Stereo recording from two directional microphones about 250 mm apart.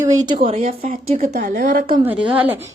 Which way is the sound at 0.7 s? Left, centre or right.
Right.